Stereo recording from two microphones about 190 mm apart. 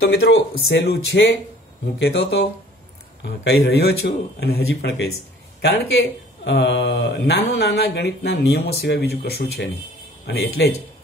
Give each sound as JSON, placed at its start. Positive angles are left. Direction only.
{"t": 0.0, "sound": "speech", "side_deg": 65}
{"t": 3.4, "sound": "speech", "side_deg": 60}
{"t": 6.4, "sound": "speech", "side_deg": 70}